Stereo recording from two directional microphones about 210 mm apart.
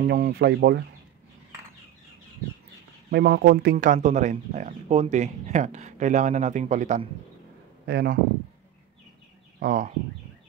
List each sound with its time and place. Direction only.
0.0 s speech: 45° right (ahead or behind)
3.1 s speech: 50° right (ahead or behind)
3.7 s speech: 35° right (ahead or behind)
7.8 s speech: 50° right (ahead or behind)
9.6 s speech: 40° right (ahead or behind)